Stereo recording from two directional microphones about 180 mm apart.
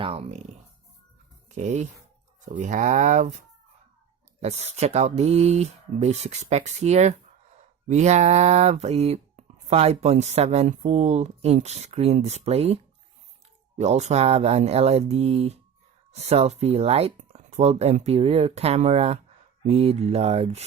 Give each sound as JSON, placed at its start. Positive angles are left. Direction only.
{"t": 0.0, "sound": "speech", "side_deg": -35}
{"t": 1.5, "sound": "speech", "side_deg": -40}